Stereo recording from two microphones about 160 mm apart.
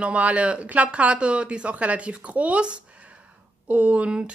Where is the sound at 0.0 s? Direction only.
10° right (ahead or behind).